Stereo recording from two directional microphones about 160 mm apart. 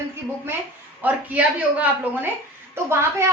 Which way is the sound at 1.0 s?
10° right (ahead or behind).